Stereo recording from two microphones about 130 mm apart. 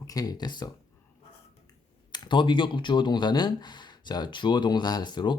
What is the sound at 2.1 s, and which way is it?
Speech, 35° left (ahead or behind).